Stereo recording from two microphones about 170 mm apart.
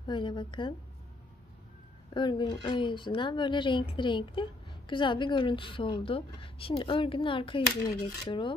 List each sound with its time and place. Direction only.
0.0 s a woman's voice: 25° left (ahead or behind)
2.1 s a woman's voice: 25° left (ahead or behind)